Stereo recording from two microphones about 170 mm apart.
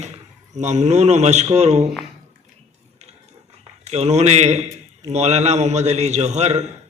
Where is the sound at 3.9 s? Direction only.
40° right (ahead or behind).